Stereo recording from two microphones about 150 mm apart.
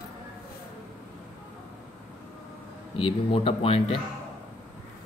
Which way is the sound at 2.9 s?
40° left (ahead or behind).